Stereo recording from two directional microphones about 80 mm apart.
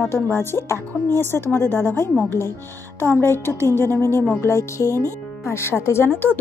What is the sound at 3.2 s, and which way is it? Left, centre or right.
A woman's voice, left.